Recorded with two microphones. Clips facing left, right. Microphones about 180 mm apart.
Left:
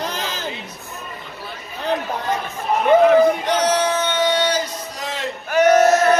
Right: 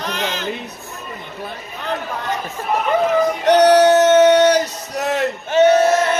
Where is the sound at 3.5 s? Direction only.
70° right (ahead or behind).